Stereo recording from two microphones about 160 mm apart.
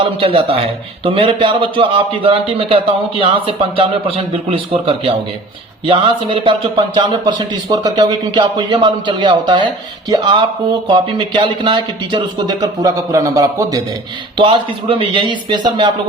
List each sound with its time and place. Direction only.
0.0 s speech: 35° right (ahead or behind)
14.3 s speech: 30° right (ahead or behind)